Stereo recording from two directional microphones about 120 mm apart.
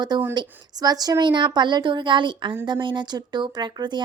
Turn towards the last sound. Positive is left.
turn(degrees=-40)  # may be behind; listen again after turning